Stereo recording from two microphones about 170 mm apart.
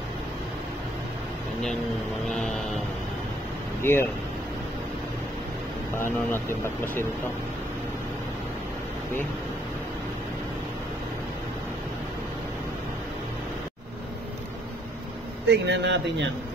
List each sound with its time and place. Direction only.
2.2 s vehicle: centre (ahead or behind)
3.8 s speech: 15° left (ahead or behind)
5.9 s speech: 15° left (ahead or behind)
15.4 s speech: 90° right